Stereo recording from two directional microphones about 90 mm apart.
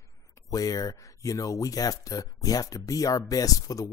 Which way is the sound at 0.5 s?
40° left (ahead or behind).